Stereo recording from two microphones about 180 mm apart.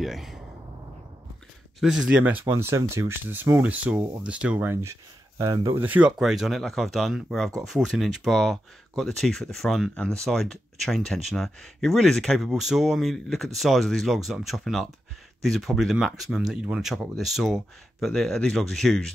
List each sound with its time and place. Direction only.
0.0 s speech: centre (ahead or behind)
1.8 s speech: 5° right (ahead or behind); by 5.9 s 20° right (ahead or behind)
5.9 s speech: 5° right (ahead or behind)